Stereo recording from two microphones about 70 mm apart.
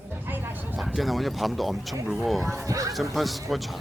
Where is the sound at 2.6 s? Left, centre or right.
Right.